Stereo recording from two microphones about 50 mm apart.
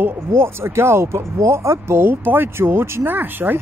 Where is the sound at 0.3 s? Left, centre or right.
Right.